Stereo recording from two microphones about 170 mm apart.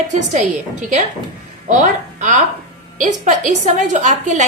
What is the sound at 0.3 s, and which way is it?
A woman's voice, 45° right (ahead or behind).